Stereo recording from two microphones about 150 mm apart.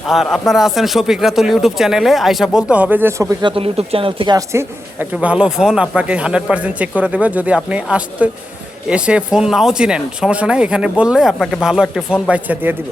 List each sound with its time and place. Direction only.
0.1 s speech: centre (ahead or behind); by 3.3 s 20° right (ahead or behind)
3.4 s speech: 40° right (ahead or behind)
4.4 s a woman's voice: 20° right (ahead or behind)
5.1 s speech: 5° right (ahead or behind)